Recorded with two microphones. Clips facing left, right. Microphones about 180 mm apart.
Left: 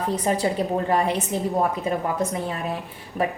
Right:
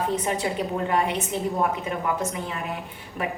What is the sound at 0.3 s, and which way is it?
A woman's voice, 35° left (ahead or behind).